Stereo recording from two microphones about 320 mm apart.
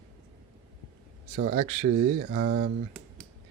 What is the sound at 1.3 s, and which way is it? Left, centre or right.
Speech, right.